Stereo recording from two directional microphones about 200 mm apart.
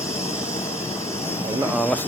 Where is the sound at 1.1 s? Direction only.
10° left (ahead or behind).